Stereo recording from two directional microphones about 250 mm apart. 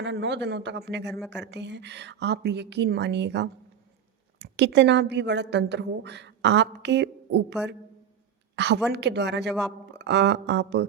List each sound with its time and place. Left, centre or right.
0.0 s a woman's voice: right